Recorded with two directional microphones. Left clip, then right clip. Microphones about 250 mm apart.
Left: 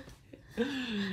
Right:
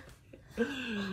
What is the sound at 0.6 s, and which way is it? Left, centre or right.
Speech, left.